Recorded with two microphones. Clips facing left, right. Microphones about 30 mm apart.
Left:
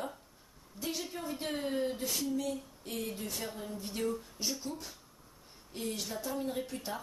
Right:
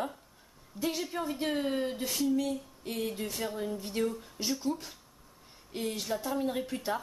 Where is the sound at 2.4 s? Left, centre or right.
Right.